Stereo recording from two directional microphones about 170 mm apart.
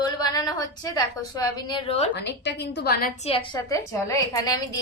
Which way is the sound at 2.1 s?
85° left.